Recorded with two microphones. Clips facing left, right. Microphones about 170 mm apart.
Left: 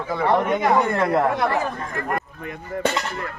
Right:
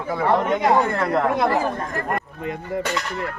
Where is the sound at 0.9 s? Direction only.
10° left (ahead or behind).